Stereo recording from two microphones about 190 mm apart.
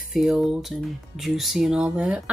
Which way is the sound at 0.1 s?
Centre (ahead or behind).